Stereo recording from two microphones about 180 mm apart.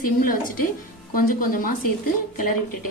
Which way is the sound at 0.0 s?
50° left (ahead or behind).